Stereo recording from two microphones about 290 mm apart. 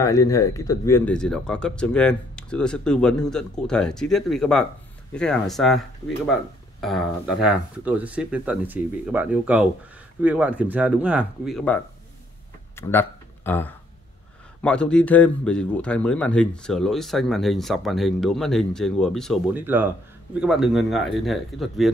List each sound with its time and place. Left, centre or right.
0.0 s speech: centre
12.7 s a sound: centre
14.6 s speech: centre